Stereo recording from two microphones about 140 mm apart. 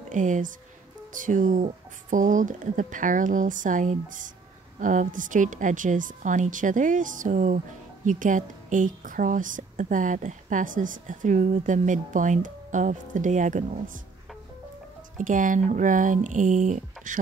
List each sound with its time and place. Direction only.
0.1 s a woman's voice: 65° right (ahead or behind)
15.1 s a woman's voice: 65° right (ahead or behind)